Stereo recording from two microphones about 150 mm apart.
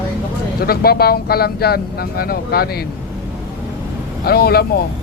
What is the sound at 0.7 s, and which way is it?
Speech, 90° left.